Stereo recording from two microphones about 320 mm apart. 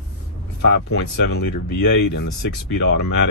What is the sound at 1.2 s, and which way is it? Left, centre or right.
Speech, left.